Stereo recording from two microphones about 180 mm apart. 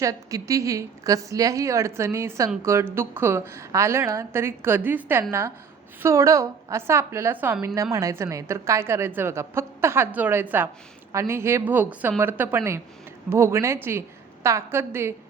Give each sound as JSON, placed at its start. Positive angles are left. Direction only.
{"t": 0.0, "sound": "a woman's voice", "side_deg": -20}